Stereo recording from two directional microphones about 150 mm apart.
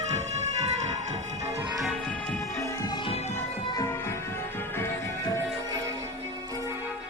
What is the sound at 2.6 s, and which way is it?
Music, 20° left (ahead or behind).